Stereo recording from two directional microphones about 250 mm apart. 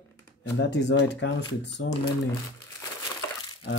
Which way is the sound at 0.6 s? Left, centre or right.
Left.